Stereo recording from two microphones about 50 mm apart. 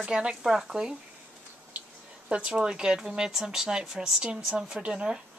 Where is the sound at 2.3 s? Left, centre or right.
Right.